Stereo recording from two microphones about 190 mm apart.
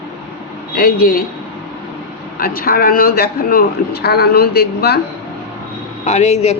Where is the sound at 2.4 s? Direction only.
50° left (ahead or behind).